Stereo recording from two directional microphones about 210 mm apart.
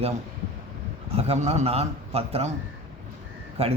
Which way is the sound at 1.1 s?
30° right (ahead or behind).